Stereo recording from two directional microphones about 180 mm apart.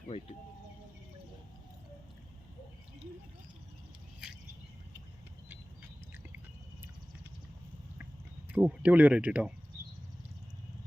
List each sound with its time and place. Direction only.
0.1 s speech: 30° left (ahead or behind)
4.2 s a sound: 5° right (ahead or behind)
8.5 s speech: 10° right (ahead or behind)